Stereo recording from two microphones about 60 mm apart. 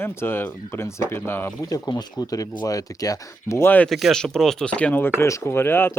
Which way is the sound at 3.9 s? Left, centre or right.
Centre.